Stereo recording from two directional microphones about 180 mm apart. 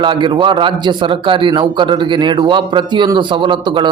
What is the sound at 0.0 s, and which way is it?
A man's voice, 25° right (ahead or behind).